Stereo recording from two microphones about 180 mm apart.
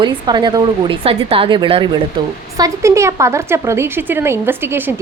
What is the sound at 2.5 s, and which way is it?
A woman's voice, 20° right (ahead or behind).